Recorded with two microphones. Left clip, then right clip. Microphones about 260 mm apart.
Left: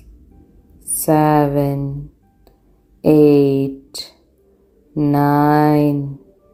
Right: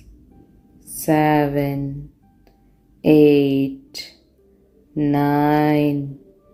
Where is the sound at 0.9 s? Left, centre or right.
Centre.